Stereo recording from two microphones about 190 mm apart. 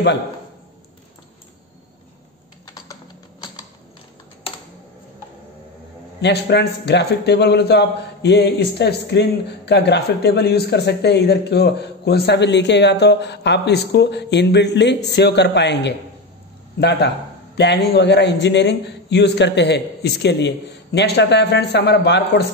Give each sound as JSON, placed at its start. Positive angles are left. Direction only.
{"t": 2.6, "sound": "typing", "side_deg": 20}
{"t": 6.2, "sound": "a man's voice", "side_deg": 60}
{"t": 17.6, "sound": "a man's voice", "side_deg": 60}